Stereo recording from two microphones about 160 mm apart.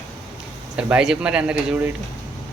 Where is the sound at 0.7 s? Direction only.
5° right (ahead or behind).